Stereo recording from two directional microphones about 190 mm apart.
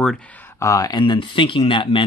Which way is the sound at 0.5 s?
15° left (ahead or behind).